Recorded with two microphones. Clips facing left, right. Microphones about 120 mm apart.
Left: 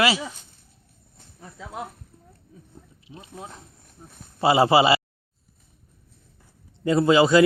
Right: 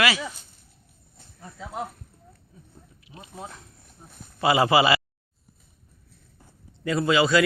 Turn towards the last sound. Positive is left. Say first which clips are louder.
# left 4 dB
turn(degrees=25)  # may be behind; listen again after turning